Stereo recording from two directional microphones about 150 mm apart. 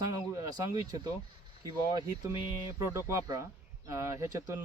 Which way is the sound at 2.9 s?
20° right (ahead or behind).